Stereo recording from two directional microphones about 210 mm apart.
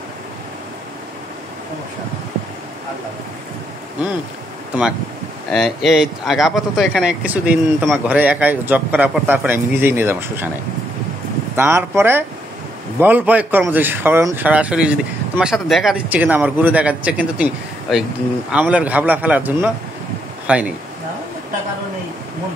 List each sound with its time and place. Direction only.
5.5 s speech: centre (ahead or behind)
11.5 s speech: 10° right (ahead or behind)